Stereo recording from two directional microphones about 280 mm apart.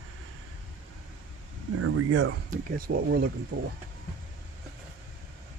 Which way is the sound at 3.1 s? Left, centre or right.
Right.